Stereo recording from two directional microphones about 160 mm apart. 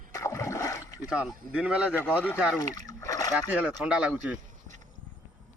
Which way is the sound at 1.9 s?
15° left (ahead or behind).